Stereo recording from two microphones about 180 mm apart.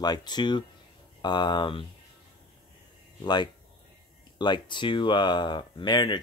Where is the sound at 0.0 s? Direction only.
25° left (ahead or behind).